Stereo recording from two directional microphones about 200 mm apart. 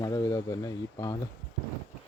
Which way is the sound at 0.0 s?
15° left (ahead or behind).